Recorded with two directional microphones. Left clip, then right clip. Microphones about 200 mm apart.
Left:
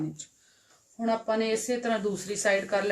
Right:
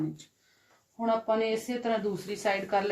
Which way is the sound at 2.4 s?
25° left (ahead or behind).